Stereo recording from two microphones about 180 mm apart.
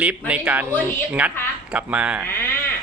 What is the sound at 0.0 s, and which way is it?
A man's voice, 5° right (ahead or behind).